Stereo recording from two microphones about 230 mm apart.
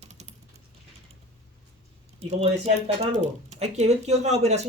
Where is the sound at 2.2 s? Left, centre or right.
Right.